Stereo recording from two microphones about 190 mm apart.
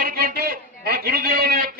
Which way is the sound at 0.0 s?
50° right (ahead or behind).